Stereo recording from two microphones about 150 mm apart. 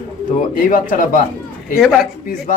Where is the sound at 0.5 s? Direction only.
65° left (ahead or behind).